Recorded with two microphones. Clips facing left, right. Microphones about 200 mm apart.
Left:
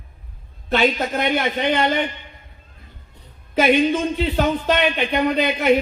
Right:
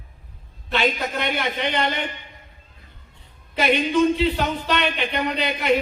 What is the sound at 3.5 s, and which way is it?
Speech, 45° left (ahead or behind).